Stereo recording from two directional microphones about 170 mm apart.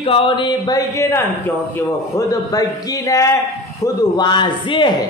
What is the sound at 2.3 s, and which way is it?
Speech, 20° left (ahead or behind).